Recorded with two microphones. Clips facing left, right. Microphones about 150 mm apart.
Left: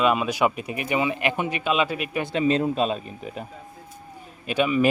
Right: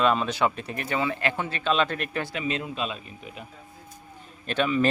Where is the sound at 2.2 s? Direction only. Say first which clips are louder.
Left 8 dB; 35° left (ahead or behind).